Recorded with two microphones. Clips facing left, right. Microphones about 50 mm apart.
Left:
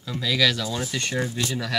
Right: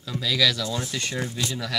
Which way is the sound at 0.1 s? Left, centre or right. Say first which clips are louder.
Left 1 dB; centre.